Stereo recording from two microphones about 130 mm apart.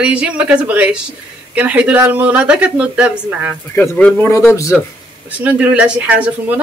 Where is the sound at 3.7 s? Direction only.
20° left (ahead or behind).